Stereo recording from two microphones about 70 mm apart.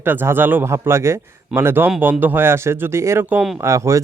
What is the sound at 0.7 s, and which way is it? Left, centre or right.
Speech, right.